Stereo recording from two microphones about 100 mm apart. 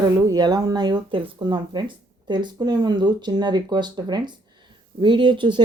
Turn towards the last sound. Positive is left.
turn(degrees=-55)  # may be behind; listen again after turning